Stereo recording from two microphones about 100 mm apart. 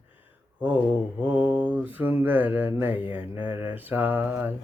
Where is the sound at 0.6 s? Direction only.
15° right (ahead or behind).